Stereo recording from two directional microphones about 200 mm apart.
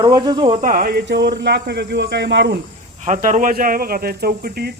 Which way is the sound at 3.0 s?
40° right (ahead or behind).